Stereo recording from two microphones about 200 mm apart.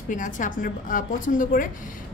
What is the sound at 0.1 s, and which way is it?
A woman's voice, 40° left (ahead or behind).